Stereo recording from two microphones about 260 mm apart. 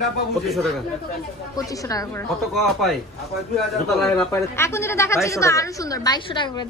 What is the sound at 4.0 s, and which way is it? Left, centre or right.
A woman's voice, centre.